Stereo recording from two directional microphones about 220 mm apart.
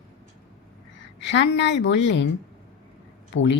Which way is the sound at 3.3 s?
60° left (ahead or behind).